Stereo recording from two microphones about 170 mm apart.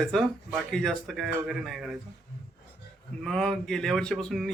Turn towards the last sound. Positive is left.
turn(degrees=0)  # may be behind; listen again after turning